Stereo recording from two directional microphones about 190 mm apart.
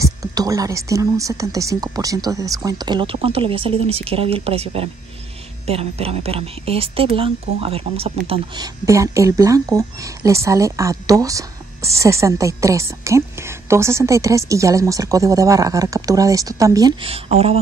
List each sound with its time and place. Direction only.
0.0 s a woman's voice: 20° right (ahead or behind)
17.0 s speech: 30° right (ahead or behind)